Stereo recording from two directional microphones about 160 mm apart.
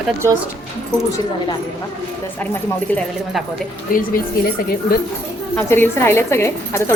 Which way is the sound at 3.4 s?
Centre (ahead or behind).